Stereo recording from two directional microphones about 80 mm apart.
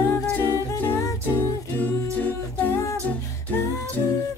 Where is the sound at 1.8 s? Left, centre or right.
Left.